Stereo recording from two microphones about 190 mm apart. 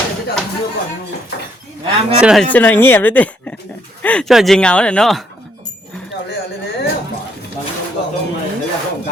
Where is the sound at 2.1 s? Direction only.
Centre (ahead or behind).